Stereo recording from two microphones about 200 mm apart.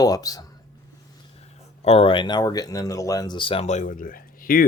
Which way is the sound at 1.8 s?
30° left (ahead or behind).